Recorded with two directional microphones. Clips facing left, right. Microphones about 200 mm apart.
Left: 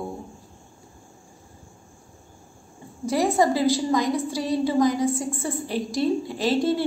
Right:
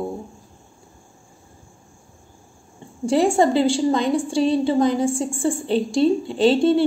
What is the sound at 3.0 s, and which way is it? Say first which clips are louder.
A woman's voice: right 4 dB; 30° right (ahead or behind).